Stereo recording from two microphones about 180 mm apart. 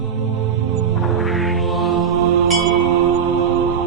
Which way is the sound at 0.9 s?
Centre (ahead or behind).